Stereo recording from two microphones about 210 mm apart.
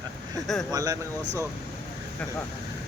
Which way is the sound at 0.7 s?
15° right (ahead or behind).